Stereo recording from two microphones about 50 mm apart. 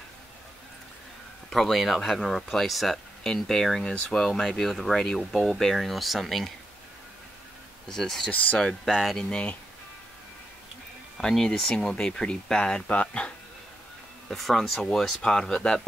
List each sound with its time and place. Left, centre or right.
1.5 s speech: centre
7.9 s speech: centre
8.8 s speech: centre
9.1 s speech: centre
11.1 s speech: centre; by 13.3 s left
14.3 s speech: centre